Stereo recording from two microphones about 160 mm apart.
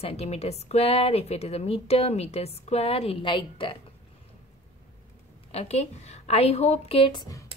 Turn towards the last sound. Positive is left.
turn(degrees=25)  # may be behind; listen again after turning